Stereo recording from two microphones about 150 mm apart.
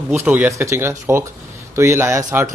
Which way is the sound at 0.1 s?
15° right (ahead or behind).